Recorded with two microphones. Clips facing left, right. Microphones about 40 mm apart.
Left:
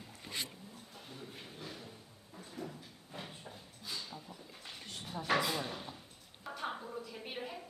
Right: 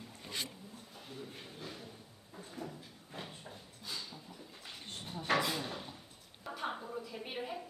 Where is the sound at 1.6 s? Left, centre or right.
Centre.